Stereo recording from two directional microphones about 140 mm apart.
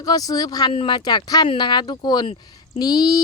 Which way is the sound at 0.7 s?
40° left (ahead or behind).